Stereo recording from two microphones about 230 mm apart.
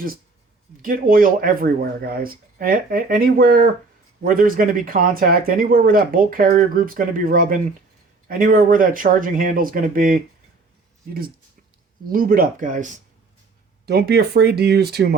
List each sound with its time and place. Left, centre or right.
0.8 s speech: right
12.0 s speech: right
13.8 s speech: right